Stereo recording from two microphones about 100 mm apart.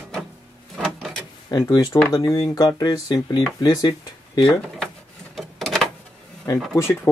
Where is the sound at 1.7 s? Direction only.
40° left (ahead or behind).